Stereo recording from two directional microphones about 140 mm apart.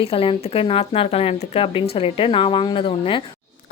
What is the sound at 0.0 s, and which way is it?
Speech, 40° left (ahead or behind).